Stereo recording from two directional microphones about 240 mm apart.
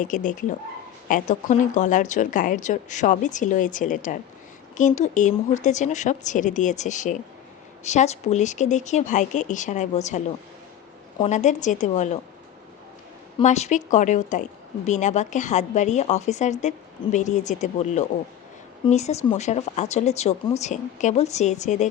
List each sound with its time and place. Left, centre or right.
0.0 s a woman's voice: left
13.4 s a woman's voice: left